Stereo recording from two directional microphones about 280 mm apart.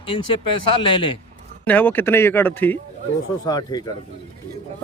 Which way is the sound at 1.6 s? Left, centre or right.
Centre.